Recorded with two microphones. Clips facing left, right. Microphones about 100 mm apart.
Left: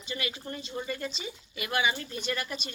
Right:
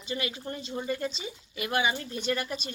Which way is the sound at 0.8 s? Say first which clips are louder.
Right 5 dB; 15° right (ahead or behind).